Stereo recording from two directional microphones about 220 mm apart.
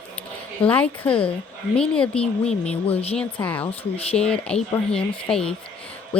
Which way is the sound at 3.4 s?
5° left (ahead or behind).